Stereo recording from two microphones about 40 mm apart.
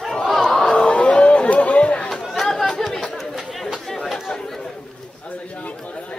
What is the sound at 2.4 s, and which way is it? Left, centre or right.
Chatter, centre.